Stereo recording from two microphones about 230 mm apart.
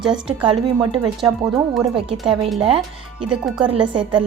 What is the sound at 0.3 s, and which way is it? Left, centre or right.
Speech, right.